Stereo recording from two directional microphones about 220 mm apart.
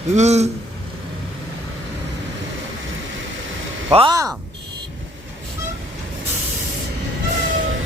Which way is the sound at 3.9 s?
20° right (ahead or behind).